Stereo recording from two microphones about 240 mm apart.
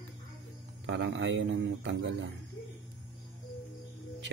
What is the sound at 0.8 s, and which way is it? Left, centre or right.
A man's voice, right.